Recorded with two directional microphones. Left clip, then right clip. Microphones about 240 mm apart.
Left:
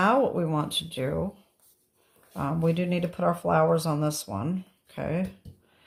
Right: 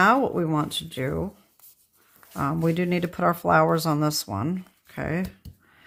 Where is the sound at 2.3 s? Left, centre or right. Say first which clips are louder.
Right 2 dB; right.